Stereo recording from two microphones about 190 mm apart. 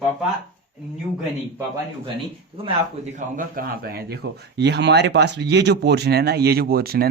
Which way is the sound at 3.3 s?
50° right (ahead or behind).